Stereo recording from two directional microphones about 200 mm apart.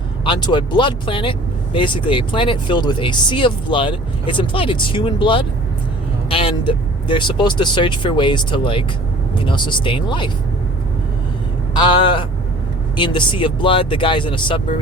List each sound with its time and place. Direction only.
0.3 s speech: 20° left (ahead or behind)
11.8 s a sound: 25° left (ahead or behind)
13.0 s speech: 25° left (ahead or behind)